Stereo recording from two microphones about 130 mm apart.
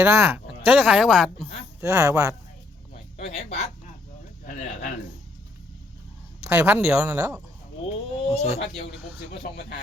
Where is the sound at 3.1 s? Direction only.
55° left (ahead or behind).